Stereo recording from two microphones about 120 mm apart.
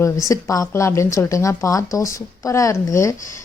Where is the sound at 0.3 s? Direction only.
25° left (ahead or behind).